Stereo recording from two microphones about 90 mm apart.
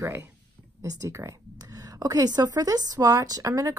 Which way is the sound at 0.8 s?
35° right (ahead or behind).